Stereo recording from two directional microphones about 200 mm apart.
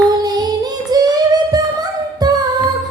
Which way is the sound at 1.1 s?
20° right (ahead or behind).